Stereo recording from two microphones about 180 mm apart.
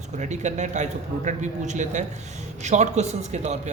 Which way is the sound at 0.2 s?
40° right (ahead or behind).